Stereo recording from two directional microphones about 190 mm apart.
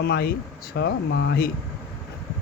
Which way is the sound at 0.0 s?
60° left (ahead or behind).